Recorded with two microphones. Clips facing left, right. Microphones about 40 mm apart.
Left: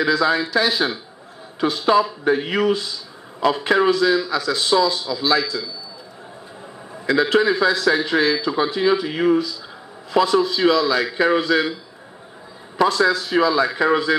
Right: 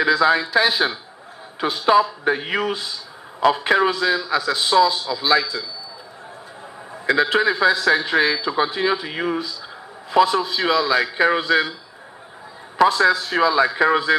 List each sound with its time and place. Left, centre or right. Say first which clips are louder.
0.0 s a man's voice: right 2 dB; right
7.1 s a man's voice: left 1 dB; right
12.8 s a man's voice: right 2 dB; right